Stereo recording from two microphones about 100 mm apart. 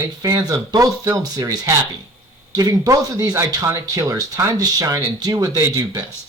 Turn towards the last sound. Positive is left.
turn(degrees=-35)  # may be behind; listen again after turning